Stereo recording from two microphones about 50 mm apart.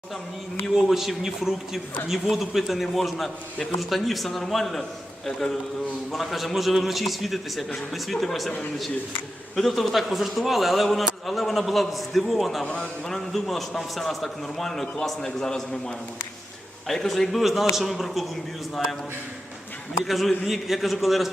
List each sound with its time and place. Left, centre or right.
0.6 s a man's voice: centre
9.6 s a man's voice: centre
16.8 s a man's voice: centre
20.1 s a man's voice: centre